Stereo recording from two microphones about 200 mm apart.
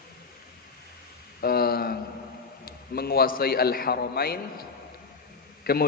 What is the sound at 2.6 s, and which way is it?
A man's voice, 50° left (ahead or behind).